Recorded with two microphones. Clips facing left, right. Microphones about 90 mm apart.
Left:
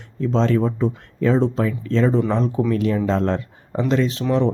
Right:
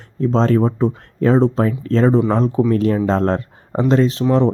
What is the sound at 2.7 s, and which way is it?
Speech, 40° right (ahead or behind).